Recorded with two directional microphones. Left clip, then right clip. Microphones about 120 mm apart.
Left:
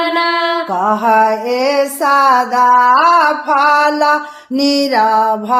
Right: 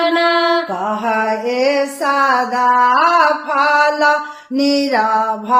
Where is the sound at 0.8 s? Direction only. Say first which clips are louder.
Left 6 dB; 40° left (ahead or behind).